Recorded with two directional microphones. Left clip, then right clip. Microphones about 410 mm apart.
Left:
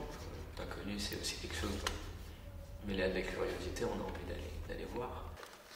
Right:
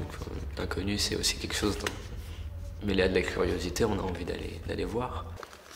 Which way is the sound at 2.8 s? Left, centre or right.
Right.